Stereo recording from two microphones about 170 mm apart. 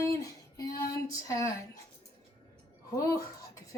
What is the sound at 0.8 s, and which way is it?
Female singing, 20° left (ahead or behind).